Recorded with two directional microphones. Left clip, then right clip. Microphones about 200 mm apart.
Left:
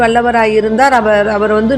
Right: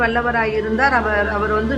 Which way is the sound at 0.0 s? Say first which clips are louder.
Left 8 dB; 35° left (ahead or behind).